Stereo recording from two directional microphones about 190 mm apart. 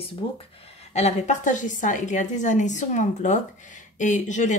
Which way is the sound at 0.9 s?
35° left (ahead or behind).